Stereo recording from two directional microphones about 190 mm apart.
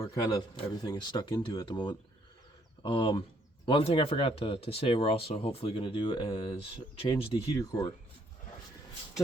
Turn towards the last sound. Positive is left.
turn(degrees=15)  # may be behind; listen again after turning